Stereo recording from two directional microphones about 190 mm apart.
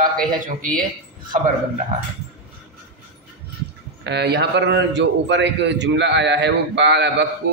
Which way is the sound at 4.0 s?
60° right (ahead or behind).